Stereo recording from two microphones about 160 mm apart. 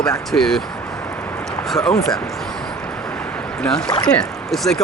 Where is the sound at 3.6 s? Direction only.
5° left (ahead or behind).